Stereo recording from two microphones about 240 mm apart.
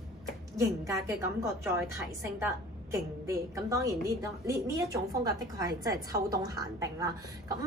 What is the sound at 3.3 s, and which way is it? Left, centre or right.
Speech, centre.